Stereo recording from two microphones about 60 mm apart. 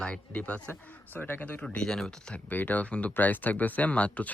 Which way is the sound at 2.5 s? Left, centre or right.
Left.